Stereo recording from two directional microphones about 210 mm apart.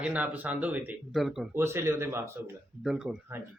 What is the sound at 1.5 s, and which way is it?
Speech, 15° right (ahead or behind).